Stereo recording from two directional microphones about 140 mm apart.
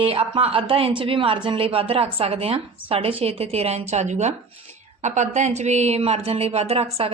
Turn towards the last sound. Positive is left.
turn(degrees=-50)  # may be behind; listen again after turning